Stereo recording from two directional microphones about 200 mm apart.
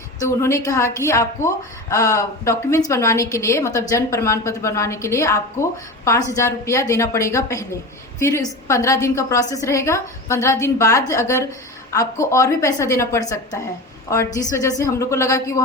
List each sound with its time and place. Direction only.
0.2 s a woman's voice: 15° left (ahead or behind)